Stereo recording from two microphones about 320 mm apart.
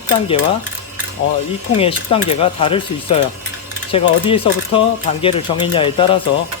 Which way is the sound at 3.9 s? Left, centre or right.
Centre.